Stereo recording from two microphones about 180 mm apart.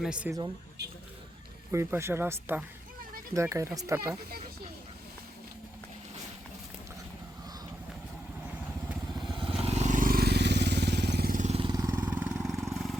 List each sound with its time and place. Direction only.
0.0 s speech: 5° right (ahead or behind)
1.7 s speech: 15° right (ahead or behind)
9.2 s vehicle: 30° right (ahead or behind)
11.6 s vehicle: 20° right (ahead or behind)
12.0 s vehicle: 10° right (ahead or behind)